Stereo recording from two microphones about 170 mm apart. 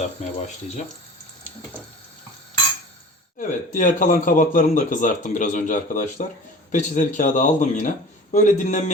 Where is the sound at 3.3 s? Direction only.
50° left (ahead or behind).